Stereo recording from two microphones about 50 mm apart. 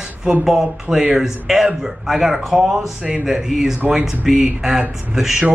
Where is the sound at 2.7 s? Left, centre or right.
Right.